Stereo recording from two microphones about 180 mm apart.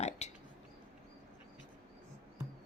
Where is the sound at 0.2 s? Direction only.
40° left (ahead or behind).